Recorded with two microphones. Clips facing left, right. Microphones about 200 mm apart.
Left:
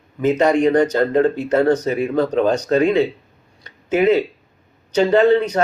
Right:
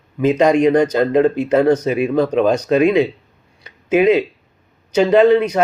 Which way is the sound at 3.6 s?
10° right (ahead or behind).